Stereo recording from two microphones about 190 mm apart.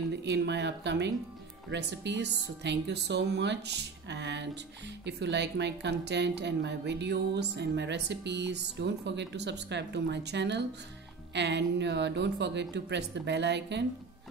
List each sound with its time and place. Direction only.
0.1 s speech: 65° right (ahead or behind)